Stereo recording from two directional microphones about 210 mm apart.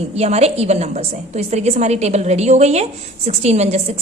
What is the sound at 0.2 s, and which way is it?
A woman's voice, 30° right (ahead or behind).